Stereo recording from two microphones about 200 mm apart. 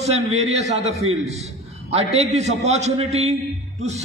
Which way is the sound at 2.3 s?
35° right (ahead or behind).